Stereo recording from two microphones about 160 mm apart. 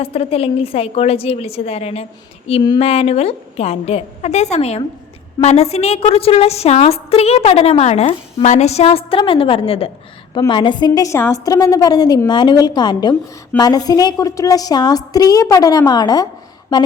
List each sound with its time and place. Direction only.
0.0 s a woman's voice: 35° left (ahead or behind)